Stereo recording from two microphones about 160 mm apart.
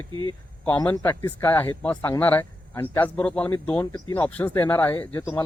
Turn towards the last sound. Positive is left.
turn(degrees=15)  # may be behind; listen again after turning